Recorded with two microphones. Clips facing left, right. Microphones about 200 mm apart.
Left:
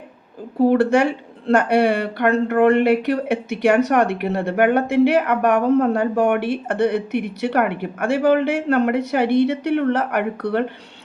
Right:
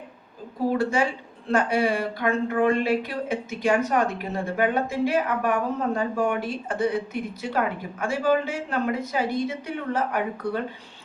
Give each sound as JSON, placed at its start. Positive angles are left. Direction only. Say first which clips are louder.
{"t": 0.6, "sound": "a woman's voice", "louder": "left 8 dB", "side_deg": 70}